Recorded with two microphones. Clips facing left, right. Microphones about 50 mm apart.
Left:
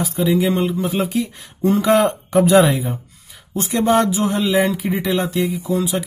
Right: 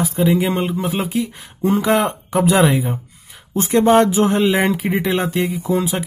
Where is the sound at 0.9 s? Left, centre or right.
Centre.